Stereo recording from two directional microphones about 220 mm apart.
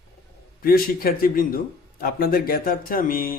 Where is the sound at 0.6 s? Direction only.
40° left (ahead or behind).